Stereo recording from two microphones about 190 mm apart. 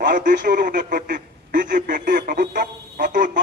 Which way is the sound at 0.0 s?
45° right (ahead or behind).